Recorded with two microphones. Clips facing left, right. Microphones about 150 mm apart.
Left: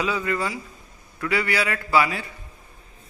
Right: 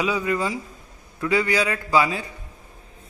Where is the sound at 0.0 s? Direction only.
15° right (ahead or behind).